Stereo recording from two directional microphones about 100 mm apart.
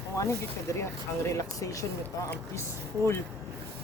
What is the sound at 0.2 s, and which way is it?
Speech, 30° left (ahead or behind).